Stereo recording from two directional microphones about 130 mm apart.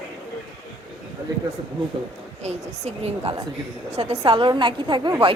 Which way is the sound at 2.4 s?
55° right (ahead or behind).